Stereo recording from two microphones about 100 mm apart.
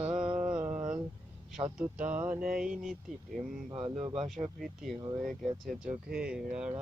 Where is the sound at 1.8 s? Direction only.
15° right (ahead or behind).